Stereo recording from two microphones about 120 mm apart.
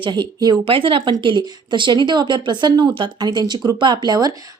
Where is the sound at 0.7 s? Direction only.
45° right (ahead or behind).